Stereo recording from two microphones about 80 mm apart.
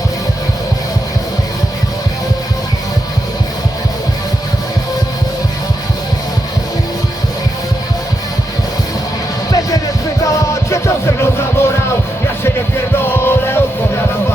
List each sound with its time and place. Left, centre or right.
10.2 s music: left
13.1 s music: left